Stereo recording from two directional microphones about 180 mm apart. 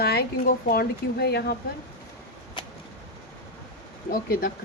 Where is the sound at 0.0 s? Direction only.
60° left (ahead or behind).